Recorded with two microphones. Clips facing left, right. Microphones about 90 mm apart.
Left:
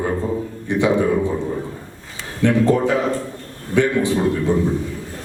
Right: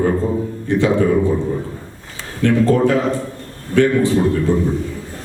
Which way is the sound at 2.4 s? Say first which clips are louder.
Right 2 dB; 15° left (ahead or behind).